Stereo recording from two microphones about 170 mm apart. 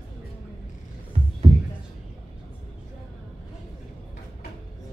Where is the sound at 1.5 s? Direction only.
25° right (ahead or behind).